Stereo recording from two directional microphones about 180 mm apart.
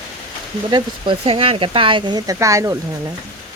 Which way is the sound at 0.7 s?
25° right (ahead or behind).